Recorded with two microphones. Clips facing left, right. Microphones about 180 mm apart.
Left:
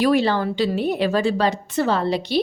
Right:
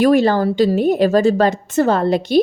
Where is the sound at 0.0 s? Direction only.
45° right (ahead or behind).